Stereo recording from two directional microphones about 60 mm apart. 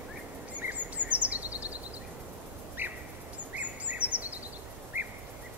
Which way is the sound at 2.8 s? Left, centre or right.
Right.